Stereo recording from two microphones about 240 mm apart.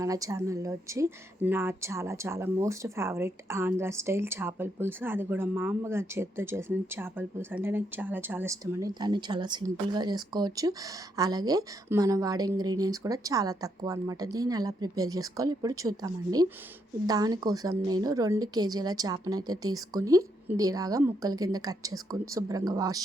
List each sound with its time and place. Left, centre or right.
0.0 s a woman's voice: centre